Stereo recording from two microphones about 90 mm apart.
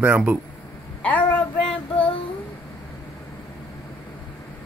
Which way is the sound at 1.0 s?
15° left (ahead or behind).